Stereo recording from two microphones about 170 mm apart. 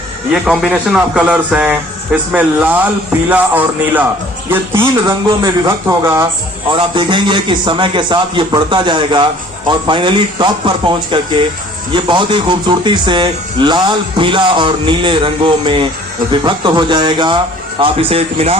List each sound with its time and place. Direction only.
0.4 s a man's voice: centre (ahead or behind)
6.7 s speech: 30° right (ahead or behind)